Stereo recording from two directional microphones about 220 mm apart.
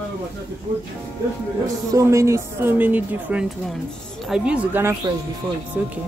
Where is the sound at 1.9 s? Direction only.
15° right (ahead or behind).